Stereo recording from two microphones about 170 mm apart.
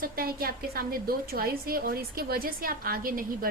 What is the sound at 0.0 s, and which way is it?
A woman's voice, 60° right (ahead or behind).